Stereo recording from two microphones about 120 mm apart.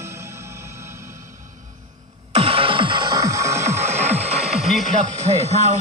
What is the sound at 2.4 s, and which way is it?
Music, 50° right (ahead or behind).